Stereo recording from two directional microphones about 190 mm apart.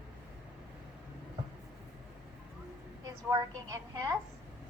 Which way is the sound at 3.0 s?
20° right (ahead or behind).